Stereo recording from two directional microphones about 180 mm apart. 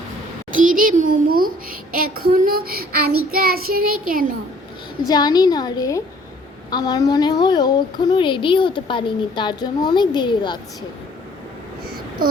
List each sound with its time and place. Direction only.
0.5 s a child's voice: 50° right (ahead or behind)
3.3 s child singing: 55° right (ahead or behind)
5.0 s speech: 20° left (ahead or behind)